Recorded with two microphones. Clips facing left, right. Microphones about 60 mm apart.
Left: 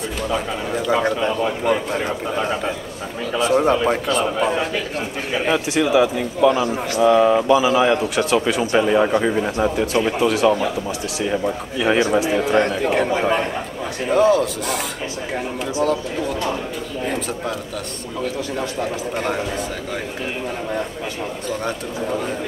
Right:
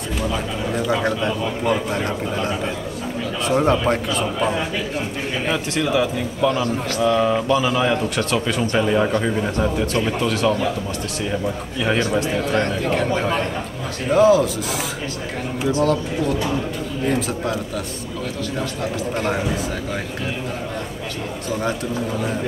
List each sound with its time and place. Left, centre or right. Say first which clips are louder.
0.2 s a man's voice: left 1 dB; centre
14.0 s a man's voice: right 1 dB; centre
18.8 s a man's voice: even; centre